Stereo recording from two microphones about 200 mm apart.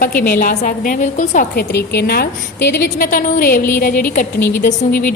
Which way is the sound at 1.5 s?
55° left (ahead or behind).